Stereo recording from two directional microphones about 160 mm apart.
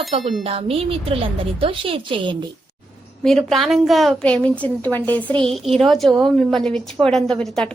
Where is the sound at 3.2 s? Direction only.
Centre (ahead or behind).